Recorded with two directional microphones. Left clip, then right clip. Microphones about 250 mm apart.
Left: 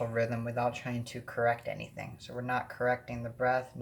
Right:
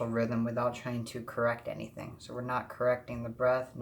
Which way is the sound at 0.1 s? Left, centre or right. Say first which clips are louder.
Even; centre.